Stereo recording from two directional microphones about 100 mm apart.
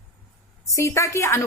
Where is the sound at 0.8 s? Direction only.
30° left (ahead or behind).